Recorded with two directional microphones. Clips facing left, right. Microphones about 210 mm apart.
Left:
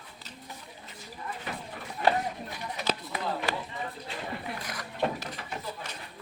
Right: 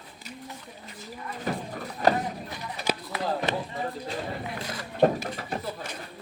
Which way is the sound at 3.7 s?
40° right (ahead or behind).